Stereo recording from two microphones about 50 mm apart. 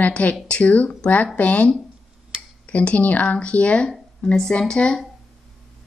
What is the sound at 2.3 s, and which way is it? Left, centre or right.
Tick-tock, centre.